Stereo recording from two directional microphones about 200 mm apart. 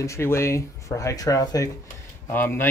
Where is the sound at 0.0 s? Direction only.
15° left (ahead or behind).